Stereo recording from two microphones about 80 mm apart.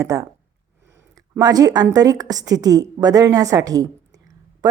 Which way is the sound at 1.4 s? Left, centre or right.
Right.